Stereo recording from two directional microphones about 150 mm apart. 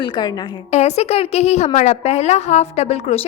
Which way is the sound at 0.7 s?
45° left (ahead or behind).